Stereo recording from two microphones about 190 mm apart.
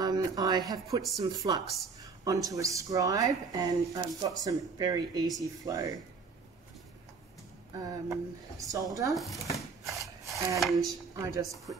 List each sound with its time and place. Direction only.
0.0 s a sound: 20° right (ahead or behind)
1.1 s speech: 20° right (ahead or behind)
7.7 s speech: 20° right (ahead or behind)
9.1 s speech: centre (ahead or behind)
9.9 s a sound: centre (ahead or behind)
10.6 s speech: centre (ahead or behind)
11.1 s speech: 20° right (ahead or behind)